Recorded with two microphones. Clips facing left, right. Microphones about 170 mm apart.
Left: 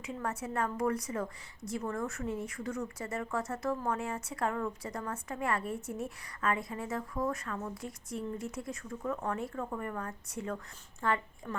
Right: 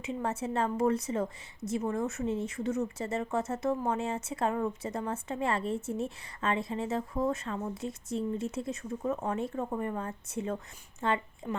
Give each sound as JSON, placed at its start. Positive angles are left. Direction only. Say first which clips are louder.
{"t": 0.0, "sound": "a woman's voice", "louder": "right 4 dB", "side_deg": -25}